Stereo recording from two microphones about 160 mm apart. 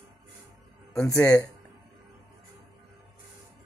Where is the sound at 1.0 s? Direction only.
20° left (ahead or behind).